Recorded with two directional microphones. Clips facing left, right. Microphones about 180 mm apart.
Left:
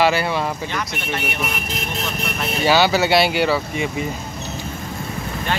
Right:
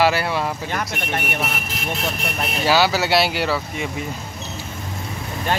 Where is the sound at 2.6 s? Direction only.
Centre (ahead or behind).